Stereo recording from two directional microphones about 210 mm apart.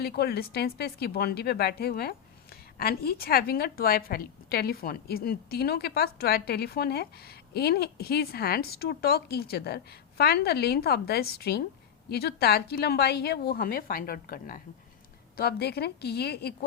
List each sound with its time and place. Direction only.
0.0 s a woman's voice: 50° left (ahead or behind)